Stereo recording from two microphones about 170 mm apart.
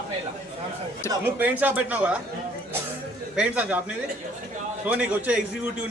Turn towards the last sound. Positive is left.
turn(degrees=-10)  # may be behind; listen again after turning